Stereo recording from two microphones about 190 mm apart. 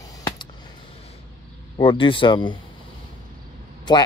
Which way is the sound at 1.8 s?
25° left (ahead or behind).